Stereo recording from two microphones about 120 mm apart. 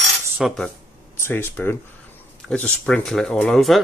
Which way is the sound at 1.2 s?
20° left (ahead or behind).